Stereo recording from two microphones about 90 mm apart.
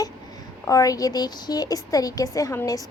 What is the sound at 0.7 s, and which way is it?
A woman's voice, 40° left (ahead or behind).